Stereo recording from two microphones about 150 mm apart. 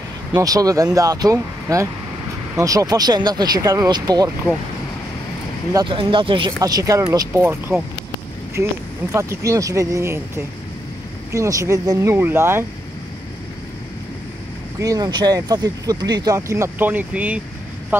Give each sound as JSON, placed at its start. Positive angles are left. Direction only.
{"t": 0.4, "sound": "speech", "side_deg": -25}
{"t": 5.9, "sound": "speech", "side_deg": -35}
{"t": 6.6, "sound": "speech", "side_deg": -25}
{"t": 14.8, "sound": "speech", "side_deg": -25}